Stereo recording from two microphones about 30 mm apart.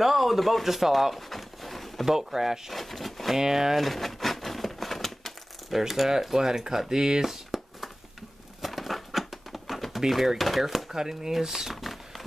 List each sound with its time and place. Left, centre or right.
0.0 s speech: centre
1.1 s a sound: centre
2.0 s speech: centre
2.7 s speech: centre
3.3 s speech: centre
3.7 s a sound: centre
5.7 s speech: centre
6.3 s speech: centre
7.2 s a sound: centre
9.9 s speech: centre
10.9 s speech: centre
11.7 s a sound: centre